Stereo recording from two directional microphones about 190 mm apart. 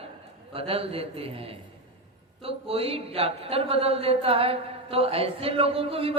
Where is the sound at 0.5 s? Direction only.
30° right (ahead or behind).